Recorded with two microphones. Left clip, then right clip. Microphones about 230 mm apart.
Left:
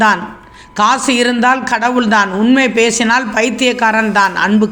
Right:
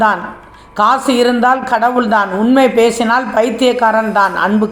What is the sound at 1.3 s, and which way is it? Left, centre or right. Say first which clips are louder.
Speech: right 1 dB; left.